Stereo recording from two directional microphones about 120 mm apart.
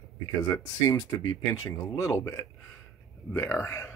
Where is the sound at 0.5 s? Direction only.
25° left (ahead or behind).